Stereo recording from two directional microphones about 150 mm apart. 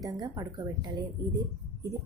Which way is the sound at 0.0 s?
25° right (ahead or behind).